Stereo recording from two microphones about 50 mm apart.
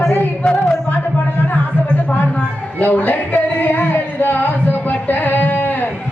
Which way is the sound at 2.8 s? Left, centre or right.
Left.